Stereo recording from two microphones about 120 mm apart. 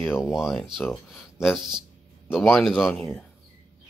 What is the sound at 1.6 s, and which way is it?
Speech, 40° right (ahead or behind).